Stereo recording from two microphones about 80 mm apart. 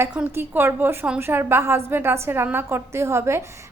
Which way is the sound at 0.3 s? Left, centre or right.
Right.